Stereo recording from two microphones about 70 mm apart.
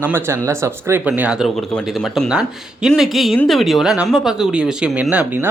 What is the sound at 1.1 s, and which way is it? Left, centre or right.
Speech, right.